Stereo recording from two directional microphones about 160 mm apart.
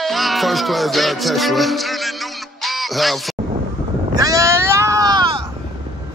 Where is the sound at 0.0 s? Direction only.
Centre (ahead or behind).